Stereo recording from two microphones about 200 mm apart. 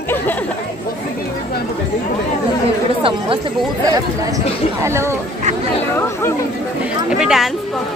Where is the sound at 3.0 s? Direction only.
25° right (ahead or behind).